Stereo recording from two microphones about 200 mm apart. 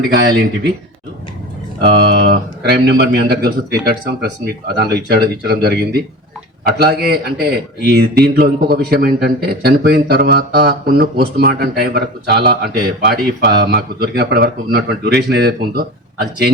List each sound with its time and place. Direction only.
0.3 s speech: 50° right (ahead or behind)
2.0 s speech: 50° right (ahead or behind)